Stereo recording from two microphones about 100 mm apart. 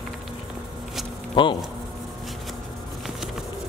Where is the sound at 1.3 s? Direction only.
55° left (ahead or behind).